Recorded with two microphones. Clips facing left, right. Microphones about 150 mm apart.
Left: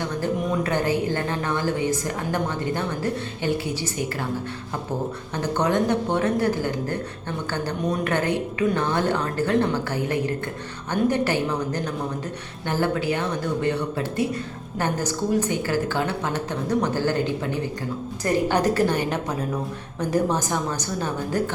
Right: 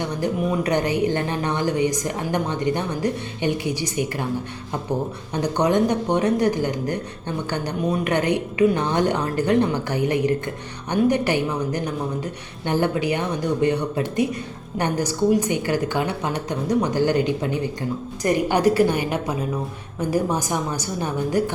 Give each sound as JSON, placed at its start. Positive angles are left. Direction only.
{"t": 0.2, "sound": "a woman's voice", "side_deg": -15}
{"t": 5.3, "sound": "a woman's voice", "side_deg": -15}